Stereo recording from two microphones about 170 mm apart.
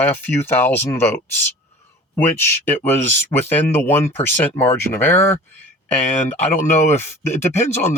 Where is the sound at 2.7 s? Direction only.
15° left (ahead or behind).